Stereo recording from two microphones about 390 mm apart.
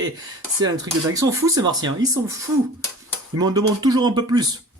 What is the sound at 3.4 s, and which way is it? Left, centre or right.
Speech, centre.